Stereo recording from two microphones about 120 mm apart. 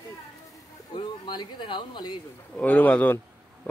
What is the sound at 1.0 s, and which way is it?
Speech, 40° left (ahead or behind).